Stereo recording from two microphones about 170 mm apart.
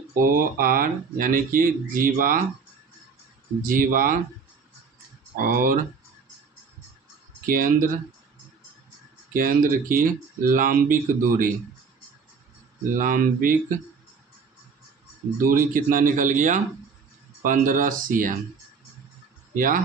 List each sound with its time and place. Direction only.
0.2 s speech: 55° right (ahead or behind)
3.6 s speech: 55° right (ahead or behind)
5.4 s speech: 55° right (ahead or behind)
7.4 s speech: 55° right (ahead or behind)
9.3 s speech: 55° right (ahead or behind)
13.0 s speech: 55° right (ahead or behind)
15.4 s speech: 55° right (ahead or behind)
19.5 s speech: 55° right (ahead or behind)